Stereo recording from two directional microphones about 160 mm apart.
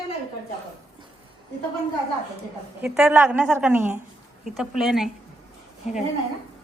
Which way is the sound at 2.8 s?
5° right (ahead or behind).